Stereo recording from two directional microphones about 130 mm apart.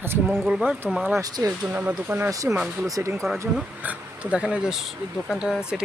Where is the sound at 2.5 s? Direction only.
10° right (ahead or behind).